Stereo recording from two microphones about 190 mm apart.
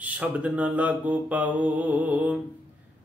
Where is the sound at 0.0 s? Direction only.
5° right (ahead or behind).